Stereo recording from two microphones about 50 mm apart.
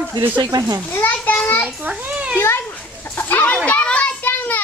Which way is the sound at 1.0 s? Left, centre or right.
Left.